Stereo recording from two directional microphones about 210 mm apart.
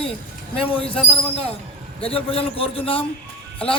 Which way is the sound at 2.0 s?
25° left (ahead or behind).